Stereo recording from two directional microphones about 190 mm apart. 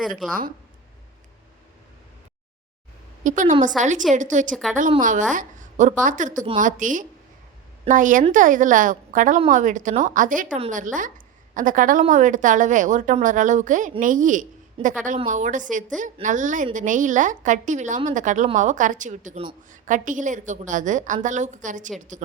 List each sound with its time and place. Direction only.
3.2 s a woman's voice: 40° right (ahead or behind)
5.3 s a sound: 45° right (ahead or behind)
6.0 s a woman's voice: 40° right (ahead or behind)